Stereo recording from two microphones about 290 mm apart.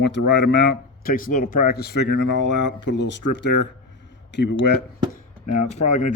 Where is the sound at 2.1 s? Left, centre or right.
Left.